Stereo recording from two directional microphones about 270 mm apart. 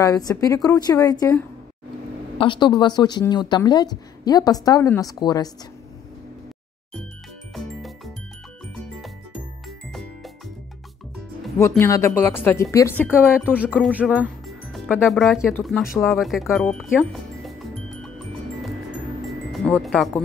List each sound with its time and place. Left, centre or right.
0.0 s speech: centre
7.5 s music: centre
9.7 s music: centre
11.5 s speech: centre
19.2 s music: centre